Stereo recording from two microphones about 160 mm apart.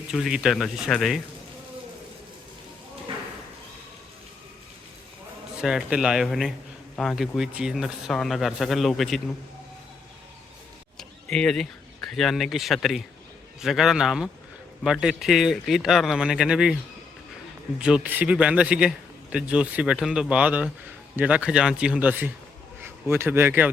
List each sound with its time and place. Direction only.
0.1 s speech: 5° right (ahead or behind)
5.5 s speech: 5° right (ahead or behind)
10.9 s a sound: 5° left (ahead or behind)
12.1 s speech: centre (ahead or behind)
17.7 s a man's voice: 5° right (ahead or behind)